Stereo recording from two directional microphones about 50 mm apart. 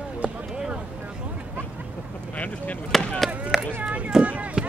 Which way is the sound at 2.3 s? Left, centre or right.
Left.